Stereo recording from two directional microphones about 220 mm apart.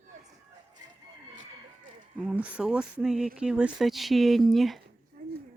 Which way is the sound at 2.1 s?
5° right (ahead or behind).